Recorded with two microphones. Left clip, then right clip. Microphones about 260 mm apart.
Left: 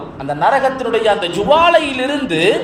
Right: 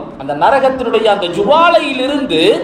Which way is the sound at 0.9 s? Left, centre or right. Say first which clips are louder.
Right 1 dB; left.